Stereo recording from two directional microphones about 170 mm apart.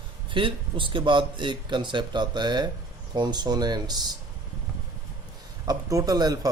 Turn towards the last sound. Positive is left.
turn(degrees=-20)  # may be behind; listen again after turning